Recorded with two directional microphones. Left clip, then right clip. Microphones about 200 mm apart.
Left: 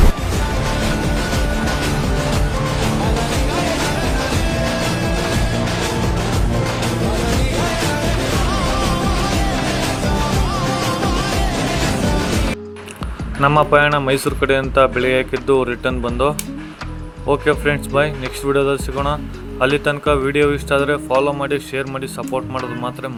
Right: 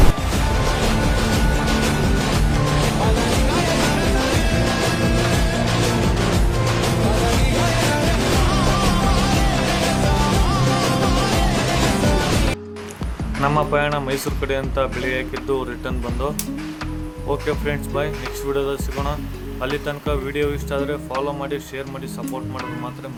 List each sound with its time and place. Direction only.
3.0 s music: centre (ahead or behind)
7.1 s music: centre (ahead or behind)
13.4 s speech: 25° left (ahead or behind)